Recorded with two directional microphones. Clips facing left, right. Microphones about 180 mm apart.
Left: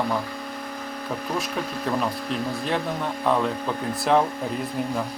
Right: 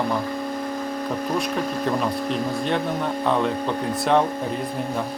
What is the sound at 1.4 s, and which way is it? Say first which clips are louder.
Speech: right 4 dB; centre (ahead or behind).